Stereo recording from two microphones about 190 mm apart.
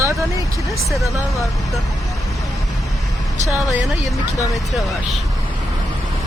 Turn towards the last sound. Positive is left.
turn(degrees=0)  # may be behind; listen again after turning